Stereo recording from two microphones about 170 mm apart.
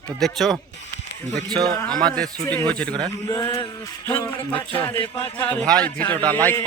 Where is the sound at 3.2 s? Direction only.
20° left (ahead or behind).